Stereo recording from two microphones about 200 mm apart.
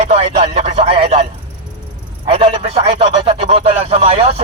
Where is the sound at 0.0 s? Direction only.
35° right (ahead or behind).